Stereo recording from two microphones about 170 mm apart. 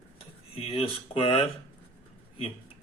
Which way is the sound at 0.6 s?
35° left (ahead or behind).